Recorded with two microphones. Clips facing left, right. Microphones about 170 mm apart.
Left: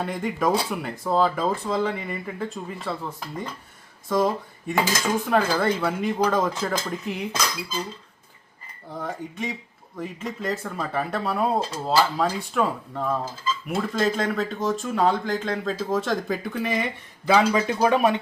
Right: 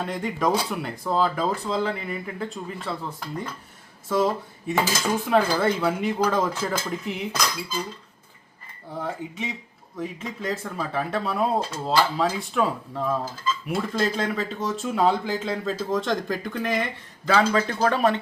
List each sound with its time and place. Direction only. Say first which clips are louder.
0.0 s speech: left 1 dB; centre (ahead or behind)
4.9 s speech: even; 10° right (ahead or behind)
9.0 s speech: left 1 dB; 5° right (ahead or behind); by 18.2 s 10° left (ahead or behind)